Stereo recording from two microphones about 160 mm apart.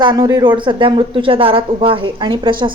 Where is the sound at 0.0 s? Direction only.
25° right (ahead or behind).